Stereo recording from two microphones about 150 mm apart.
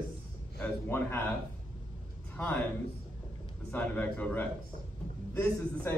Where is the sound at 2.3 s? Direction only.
10° left (ahead or behind).